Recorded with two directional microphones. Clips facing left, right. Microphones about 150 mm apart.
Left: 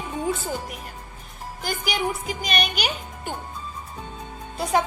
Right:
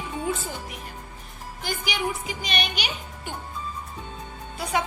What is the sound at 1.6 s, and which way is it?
Speech, 45° left (ahead or behind).